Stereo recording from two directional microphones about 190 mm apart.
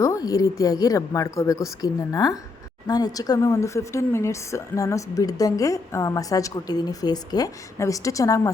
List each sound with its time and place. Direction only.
0.0 s a woman's voice: 20° left (ahead or behind)